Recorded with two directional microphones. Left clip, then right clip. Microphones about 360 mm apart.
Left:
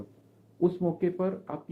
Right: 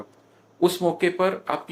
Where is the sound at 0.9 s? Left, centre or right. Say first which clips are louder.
Right 8 dB; centre.